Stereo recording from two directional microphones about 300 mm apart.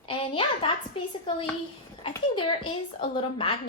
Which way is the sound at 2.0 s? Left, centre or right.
Centre.